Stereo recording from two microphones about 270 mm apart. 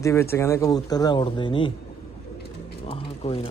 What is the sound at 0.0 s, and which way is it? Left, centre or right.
Speech, centre.